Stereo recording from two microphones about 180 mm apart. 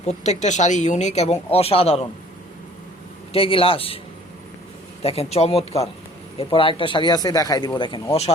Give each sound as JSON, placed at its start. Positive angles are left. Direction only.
{"t": 0.0, "sound": "speech", "side_deg": 40}
{"t": 3.3, "sound": "speech", "side_deg": 30}
{"t": 5.0, "sound": "speech", "side_deg": 35}